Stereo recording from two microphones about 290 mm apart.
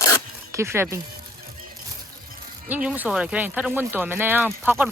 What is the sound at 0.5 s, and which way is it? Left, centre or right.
Speech, centre.